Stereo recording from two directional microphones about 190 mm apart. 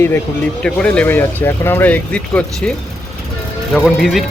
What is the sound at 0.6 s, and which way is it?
Speech, 5° left (ahead or behind).